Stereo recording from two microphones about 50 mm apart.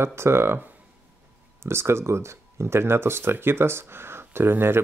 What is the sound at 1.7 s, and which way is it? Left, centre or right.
Speech, right.